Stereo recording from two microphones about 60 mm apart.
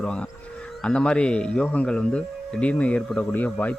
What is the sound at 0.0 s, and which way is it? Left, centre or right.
Speech, centre.